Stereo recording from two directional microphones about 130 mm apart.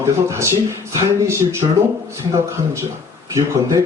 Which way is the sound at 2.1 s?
25° right (ahead or behind).